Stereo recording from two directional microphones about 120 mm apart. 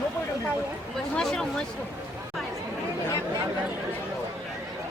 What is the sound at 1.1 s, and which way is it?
Speech, 5° left (ahead or behind).